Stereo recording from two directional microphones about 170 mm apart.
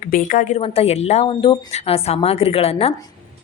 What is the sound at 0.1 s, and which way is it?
Speech, 50° left (ahead or behind).